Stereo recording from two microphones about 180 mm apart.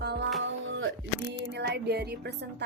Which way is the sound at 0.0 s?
65° right (ahead or behind).